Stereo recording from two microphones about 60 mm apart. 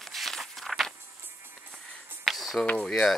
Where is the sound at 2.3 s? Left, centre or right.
Centre.